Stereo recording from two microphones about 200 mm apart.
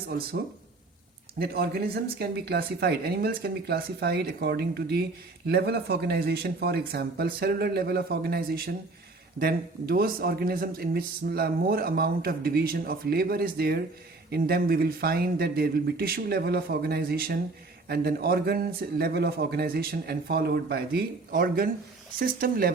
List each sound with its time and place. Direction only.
1.4 s speech: 50° right (ahead or behind)